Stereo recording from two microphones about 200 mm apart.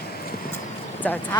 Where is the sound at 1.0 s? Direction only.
10° left (ahead or behind).